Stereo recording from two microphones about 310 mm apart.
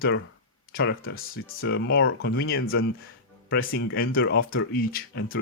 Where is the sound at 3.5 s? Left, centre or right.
Left.